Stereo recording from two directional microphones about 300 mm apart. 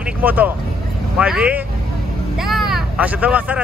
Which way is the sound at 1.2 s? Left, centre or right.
Centre.